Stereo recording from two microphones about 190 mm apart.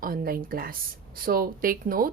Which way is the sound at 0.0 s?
50° right (ahead or behind).